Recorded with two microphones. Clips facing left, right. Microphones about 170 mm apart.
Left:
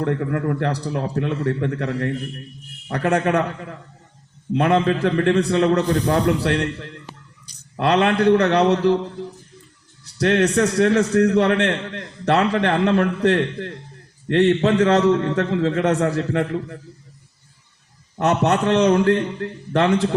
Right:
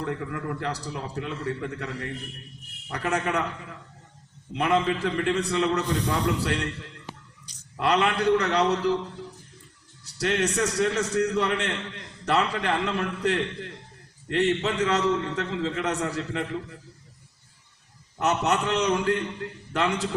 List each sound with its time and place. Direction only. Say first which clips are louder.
0.0 s a man's voice: left 9 dB; 55° left (ahead or behind)
10.0 s a man's voice: left 8 dB; 60° left (ahead or behind)
18.2 s a man's voice: left 6 dB; 55° left (ahead or behind)